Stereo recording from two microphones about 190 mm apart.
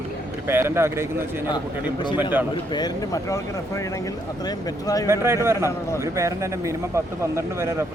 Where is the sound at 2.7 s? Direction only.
20° left (ahead or behind).